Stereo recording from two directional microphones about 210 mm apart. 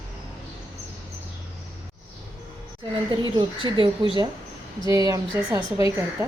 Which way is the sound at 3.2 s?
20° right (ahead or behind).